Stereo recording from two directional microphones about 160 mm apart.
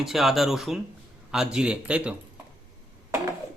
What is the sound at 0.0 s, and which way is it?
Speech, centre (ahead or behind).